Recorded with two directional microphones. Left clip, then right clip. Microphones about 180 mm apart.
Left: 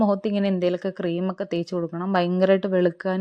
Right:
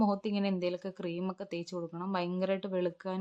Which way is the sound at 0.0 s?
25° left (ahead or behind).